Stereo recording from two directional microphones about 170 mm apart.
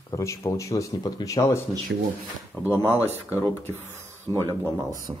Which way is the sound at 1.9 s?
90° right.